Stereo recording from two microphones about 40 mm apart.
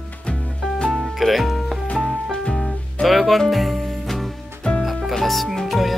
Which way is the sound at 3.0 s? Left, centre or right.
Centre.